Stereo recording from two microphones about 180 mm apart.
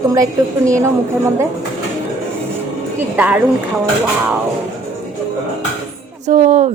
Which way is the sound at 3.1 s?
10° right (ahead or behind).